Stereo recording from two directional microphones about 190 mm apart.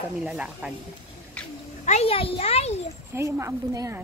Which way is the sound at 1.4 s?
5° left (ahead or behind).